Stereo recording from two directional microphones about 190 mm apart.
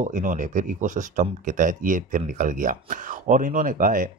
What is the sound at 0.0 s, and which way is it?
Speech, 40° right (ahead or behind).